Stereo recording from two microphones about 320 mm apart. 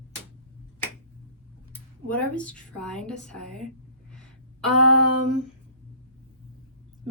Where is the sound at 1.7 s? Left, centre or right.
Centre.